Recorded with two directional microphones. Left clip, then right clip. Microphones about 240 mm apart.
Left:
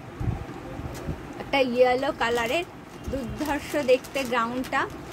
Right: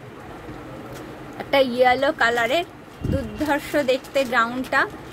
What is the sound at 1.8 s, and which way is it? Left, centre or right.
A woman's voice, centre.